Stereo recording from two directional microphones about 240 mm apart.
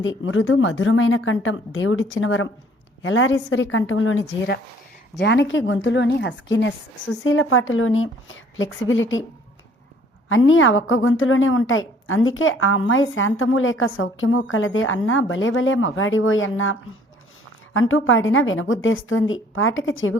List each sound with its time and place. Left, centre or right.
0.0 s a woman's voice: left
10.2 s a woman's voice: left
17.7 s a woman's voice: left